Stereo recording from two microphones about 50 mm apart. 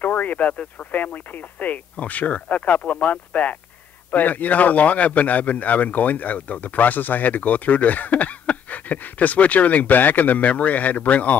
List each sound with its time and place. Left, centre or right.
0.0 s a man's voice: left